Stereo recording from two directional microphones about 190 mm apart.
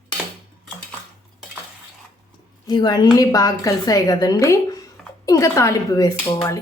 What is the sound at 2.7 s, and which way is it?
A woman's voice, 20° left (ahead or behind).